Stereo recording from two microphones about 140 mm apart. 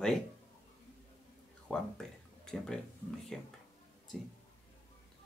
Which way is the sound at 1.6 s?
5° left (ahead or behind).